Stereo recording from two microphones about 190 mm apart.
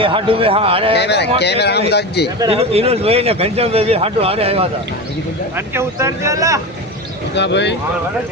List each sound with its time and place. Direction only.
0.0 s a man's voice: 30° right (ahead or behind)
0.9 s speech: 60° left (ahead or behind)
2.5 s a man's voice: 30° right (ahead or behind)
5.5 s speech: 15° right (ahead or behind)
7.3 s speech: 65° left (ahead or behind)